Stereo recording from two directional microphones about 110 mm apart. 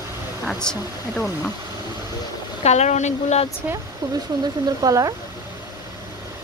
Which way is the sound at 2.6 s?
90° left.